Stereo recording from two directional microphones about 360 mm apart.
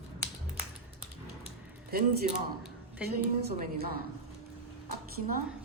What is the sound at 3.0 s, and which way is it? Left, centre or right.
Speech, right.